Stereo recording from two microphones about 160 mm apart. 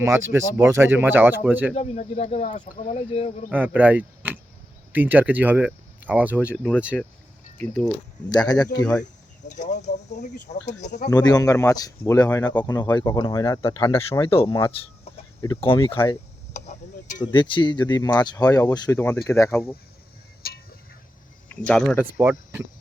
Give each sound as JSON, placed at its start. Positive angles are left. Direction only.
{"t": 0.0, "sound": "speech", "side_deg": -15}
{"t": 1.7, "sound": "speech", "side_deg": 45}
{"t": 3.5, "sound": "speech", "side_deg": -10}
{"t": 6.9, "sound": "speech", "side_deg": 5}
{"t": 8.3, "sound": "speech", "side_deg": 25}
{"t": 9.5, "sound": "speech", "side_deg": 50}
{"t": 11.1, "sound": "speech", "side_deg": 25}
{"t": 13.6, "sound": "speech", "side_deg": 35}
{"t": 16.5, "sound": "tick-tock", "side_deg": 50}
{"t": 17.3, "sound": "speech", "side_deg": 30}
{"t": 20.4, "sound": "a sound", "side_deg": 75}
{"t": 21.7, "sound": "speech", "side_deg": 5}
{"t": 22.2, "sound": "speech", "side_deg": -15}